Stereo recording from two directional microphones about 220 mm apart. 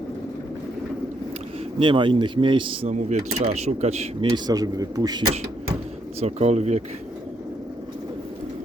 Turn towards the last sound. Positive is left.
turn(degrees=-30)  # may be behind; listen again after turning